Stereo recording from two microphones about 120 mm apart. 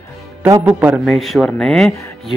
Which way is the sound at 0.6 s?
10° right (ahead or behind).